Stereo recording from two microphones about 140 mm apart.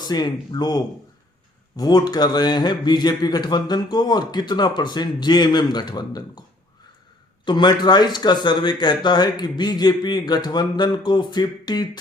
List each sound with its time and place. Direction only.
0.0 s a man's voice: 30° left (ahead or behind)
7.4 s speech: 30° left (ahead or behind)